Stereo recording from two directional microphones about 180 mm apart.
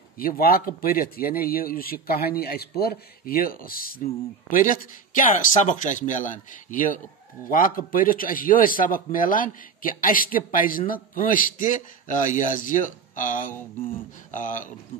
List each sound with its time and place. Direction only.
0.2 s speech: 55° left (ahead or behind)